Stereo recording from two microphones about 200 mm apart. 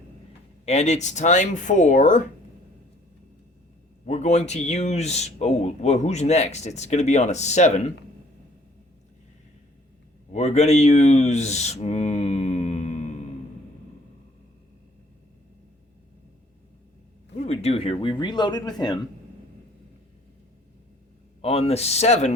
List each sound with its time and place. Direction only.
0.6 s speech: 35° left (ahead or behind)
4.0 s speech: 35° left (ahead or behind)
10.3 s speech: 35° left (ahead or behind)
17.3 s speech: 30° left (ahead or behind)
21.4 s speech: 30° left (ahead or behind)